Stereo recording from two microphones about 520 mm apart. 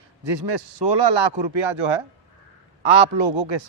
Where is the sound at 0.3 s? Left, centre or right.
Right.